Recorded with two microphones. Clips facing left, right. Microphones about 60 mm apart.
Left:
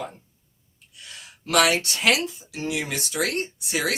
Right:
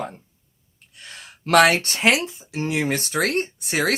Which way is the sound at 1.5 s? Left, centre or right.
Right.